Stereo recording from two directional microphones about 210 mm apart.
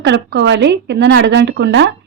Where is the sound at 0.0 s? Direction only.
55° right (ahead or behind).